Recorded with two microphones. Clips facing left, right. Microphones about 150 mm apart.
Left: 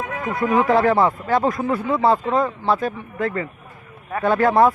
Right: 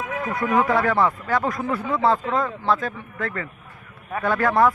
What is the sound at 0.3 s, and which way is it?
Speech, 20° left (ahead or behind).